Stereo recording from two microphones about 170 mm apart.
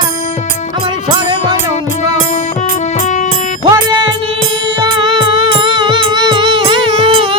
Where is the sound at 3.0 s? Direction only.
45° left (ahead or behind).